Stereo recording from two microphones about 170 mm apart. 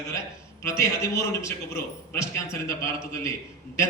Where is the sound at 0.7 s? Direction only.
15° left (ahead or behind).